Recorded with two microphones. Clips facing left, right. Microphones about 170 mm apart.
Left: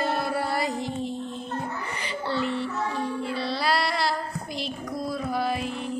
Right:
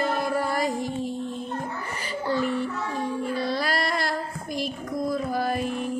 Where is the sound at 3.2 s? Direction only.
45° right (ahead or behind).